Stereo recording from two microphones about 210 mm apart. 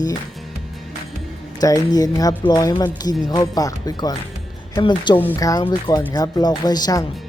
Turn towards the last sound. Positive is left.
turn(degrees=20)  # may be behind; listen again after turning